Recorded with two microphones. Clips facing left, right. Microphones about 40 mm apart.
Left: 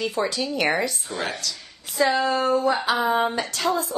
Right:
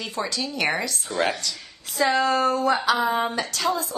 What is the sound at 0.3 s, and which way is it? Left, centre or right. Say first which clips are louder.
Speech: left 2 dB; left.